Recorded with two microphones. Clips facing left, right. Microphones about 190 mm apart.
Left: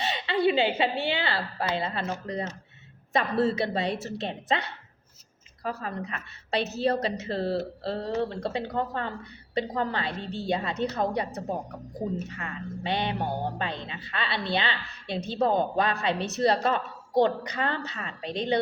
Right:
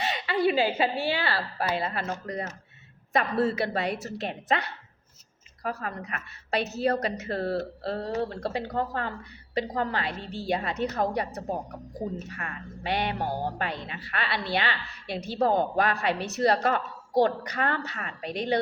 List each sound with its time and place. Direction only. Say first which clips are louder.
0.0 s a woman's voice: left 1 dB; 25° left (ahead or behind)
12.3 s speech: left 3 dB; 25° left (ahead or behind)